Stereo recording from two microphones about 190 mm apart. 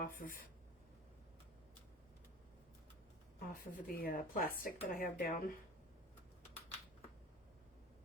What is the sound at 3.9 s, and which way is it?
A woman's voice, 50° left (ahead or behind).